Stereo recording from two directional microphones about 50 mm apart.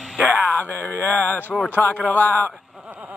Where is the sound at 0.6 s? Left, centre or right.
Left.